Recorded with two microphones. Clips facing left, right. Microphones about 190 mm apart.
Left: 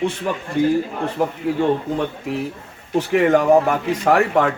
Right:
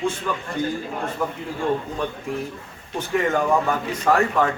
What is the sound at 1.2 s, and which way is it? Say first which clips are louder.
Speech: left 6 dB; 75° left (ahead or behind).